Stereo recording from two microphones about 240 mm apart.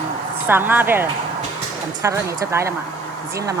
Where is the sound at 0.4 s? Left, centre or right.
Centre.